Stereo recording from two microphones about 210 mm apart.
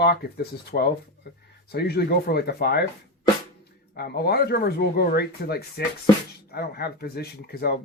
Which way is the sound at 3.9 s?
50° left (ahead or behind).